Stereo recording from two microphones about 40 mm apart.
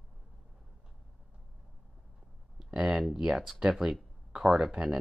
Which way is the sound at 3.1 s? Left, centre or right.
Centre.